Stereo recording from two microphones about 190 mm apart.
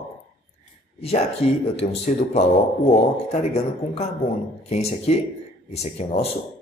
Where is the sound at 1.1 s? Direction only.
35° left (ahead or behind).